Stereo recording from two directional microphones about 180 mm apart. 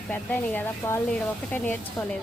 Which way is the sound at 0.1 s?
10° left (ahead or behind).